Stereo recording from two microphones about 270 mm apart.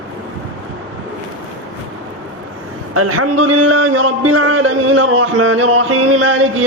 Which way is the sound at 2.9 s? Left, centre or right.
Right.